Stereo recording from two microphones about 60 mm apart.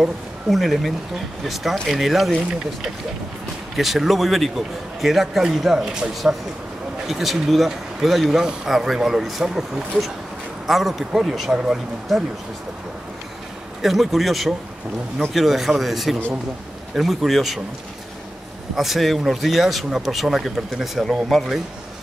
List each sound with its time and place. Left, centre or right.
0.0 s a man's voice: centre
3.7 s a man's voice: centre
13.8 s a man's voice: centre
18.8 s a man's voice: centre